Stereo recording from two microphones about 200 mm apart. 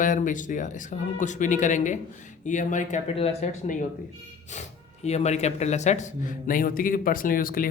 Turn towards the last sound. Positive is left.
turn(degrees=45)  # may be behind; listen again after turning